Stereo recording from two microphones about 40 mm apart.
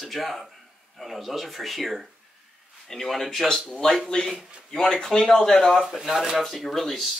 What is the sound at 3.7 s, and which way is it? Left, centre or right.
Speech, centre.